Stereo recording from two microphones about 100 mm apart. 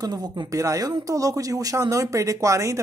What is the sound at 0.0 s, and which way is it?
Speech, 40° right (ahead or behind).